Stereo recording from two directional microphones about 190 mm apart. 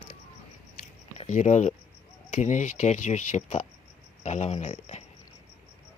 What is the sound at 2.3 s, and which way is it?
Speech, 40° left (ahead or behind).